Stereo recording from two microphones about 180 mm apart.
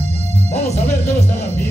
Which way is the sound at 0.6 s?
40° left (ahead or behind).